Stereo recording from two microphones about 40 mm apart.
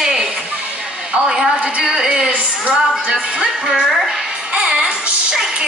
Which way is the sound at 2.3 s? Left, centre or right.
Right.